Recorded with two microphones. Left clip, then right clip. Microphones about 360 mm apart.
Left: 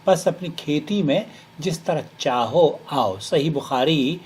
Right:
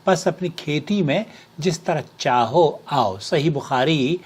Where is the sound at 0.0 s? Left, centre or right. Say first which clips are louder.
Left 1 dB; right.